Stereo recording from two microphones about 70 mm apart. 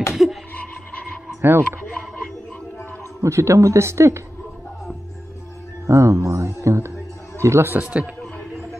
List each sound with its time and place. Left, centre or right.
0.1 s a sound: centre
1.4 s speech: right
3.2 s speech: right
5.9 s a man's voice: right
7.7 s a man's voice: right